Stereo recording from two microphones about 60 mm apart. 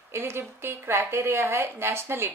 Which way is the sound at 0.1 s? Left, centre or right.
Right.